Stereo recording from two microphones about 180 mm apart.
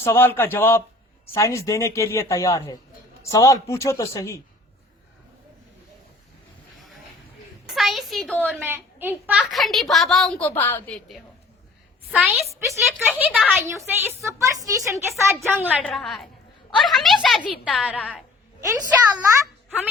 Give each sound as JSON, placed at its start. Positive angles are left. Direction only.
{"t": 0.0, "sound": "speech", "side_deg": 15}
{"t": 7.7, "sound": "a sound", "side_deg": 0}
{"t": 8.5, "sound": "a woman's voice", "side_deg": -10}
{"t": 12.0, "sound": "a woman's voice", "side_deg": 0}
{"t": 13.1, "sound": "a woman's voice", "side_deg": -10}
{"t": 15.8, "sound": "a woman's voice", "side_deg": 0}